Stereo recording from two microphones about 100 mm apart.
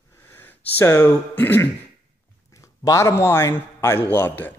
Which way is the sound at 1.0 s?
20° left (ahead or behind).